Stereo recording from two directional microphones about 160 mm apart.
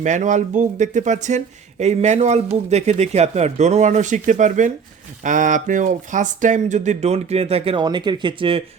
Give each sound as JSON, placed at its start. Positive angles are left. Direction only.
{"t": 0.0, "sound": "speech", "side_deg": -50}